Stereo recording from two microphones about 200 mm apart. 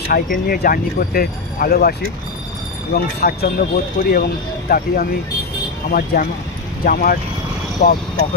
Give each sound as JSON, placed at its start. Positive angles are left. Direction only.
{"t": 0.1, "sound": "speech", "side_deg": 45}